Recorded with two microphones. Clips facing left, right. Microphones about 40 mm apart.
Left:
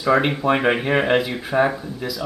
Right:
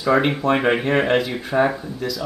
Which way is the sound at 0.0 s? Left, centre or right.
Centre.